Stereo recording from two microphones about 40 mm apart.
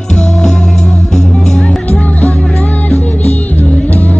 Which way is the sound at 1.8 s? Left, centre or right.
Left.